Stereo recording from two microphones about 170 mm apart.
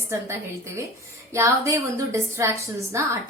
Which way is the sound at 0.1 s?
15° right (ahead or behind).